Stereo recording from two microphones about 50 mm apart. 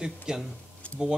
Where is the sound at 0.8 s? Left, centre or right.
Left.